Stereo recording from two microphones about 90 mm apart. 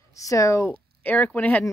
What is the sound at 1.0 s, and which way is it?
Speech, 20° left (ahead or behind).